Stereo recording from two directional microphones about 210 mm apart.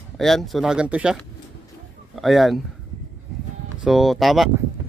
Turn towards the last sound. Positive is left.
turn(degrees=0)  # may be behind; listen again after turning